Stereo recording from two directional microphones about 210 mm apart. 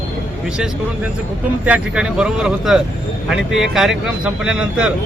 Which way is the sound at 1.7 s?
5° right (ahead or behind).